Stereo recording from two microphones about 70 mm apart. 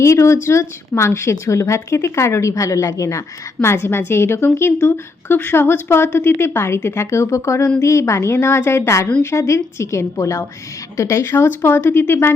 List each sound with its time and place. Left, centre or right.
0.0 s a woman's voice: left